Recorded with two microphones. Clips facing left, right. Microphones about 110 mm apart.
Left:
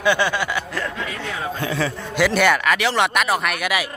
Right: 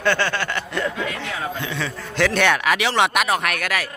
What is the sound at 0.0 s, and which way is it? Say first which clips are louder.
Speech: left 2 dB; 15° left (ahead or behind).